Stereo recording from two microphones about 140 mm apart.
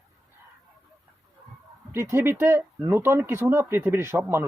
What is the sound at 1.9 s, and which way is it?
Speech, 15° right (ahead or behind).